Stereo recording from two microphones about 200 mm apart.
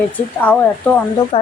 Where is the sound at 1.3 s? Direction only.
25° left (ahead or behind).